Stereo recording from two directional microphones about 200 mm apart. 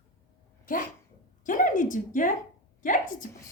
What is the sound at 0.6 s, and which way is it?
A woman's voice, 45° left (ahead or behind).